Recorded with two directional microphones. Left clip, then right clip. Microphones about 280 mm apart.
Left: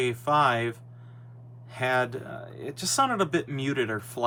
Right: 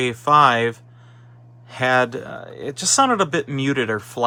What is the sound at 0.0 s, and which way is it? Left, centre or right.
Speech, right.